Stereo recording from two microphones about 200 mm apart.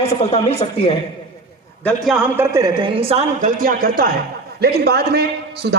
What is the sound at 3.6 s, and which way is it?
A man's voice, 45° right (ahead or behind).